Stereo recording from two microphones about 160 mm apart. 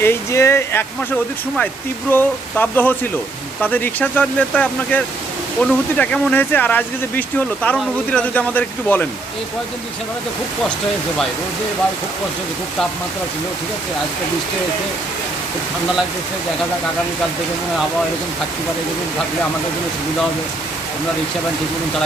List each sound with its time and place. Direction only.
0.0 s speech: 15° left (ahead or behind)